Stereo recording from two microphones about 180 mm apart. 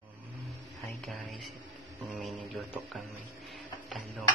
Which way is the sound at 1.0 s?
Centre (ahead or behind).